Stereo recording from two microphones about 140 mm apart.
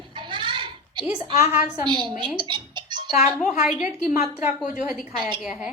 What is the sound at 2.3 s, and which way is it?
Music, 35° right (ahead or behind).